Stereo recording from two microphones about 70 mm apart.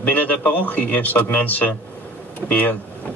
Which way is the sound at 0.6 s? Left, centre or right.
Left.